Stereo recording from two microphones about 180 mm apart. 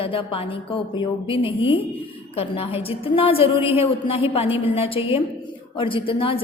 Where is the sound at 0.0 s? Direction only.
30° left (ahead or behind).